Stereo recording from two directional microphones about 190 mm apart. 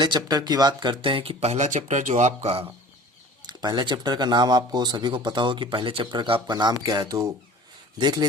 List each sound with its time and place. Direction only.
0.0 s speech: 20° right (ahead or behind)
3.4 s speech: 20° right (ahead or behind)